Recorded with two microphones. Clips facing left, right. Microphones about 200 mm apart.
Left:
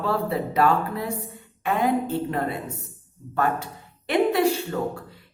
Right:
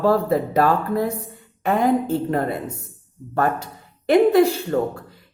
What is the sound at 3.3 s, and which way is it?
Speech, 40° right (ahead or behind).